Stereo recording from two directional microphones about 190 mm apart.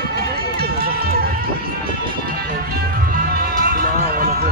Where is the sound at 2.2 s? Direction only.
50° right (ahead or behind).